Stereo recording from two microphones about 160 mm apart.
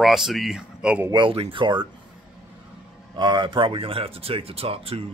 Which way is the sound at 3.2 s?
30° right (ahead or behind).